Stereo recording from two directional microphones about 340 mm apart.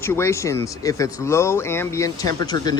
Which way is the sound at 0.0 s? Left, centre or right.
Centre.